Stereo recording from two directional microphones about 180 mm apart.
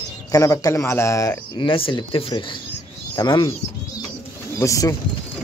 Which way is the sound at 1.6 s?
25° left (ahead or behind).